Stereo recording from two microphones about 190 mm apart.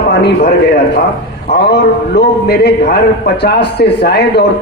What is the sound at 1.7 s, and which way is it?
A man's voice, 60° left (ahead or behind).